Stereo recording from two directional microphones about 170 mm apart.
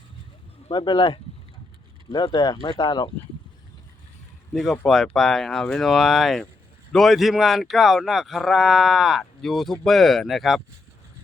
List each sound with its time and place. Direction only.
0.7 s speech: 25° left (ahead or behind)
4.5 s speech: centre (ahead or behind)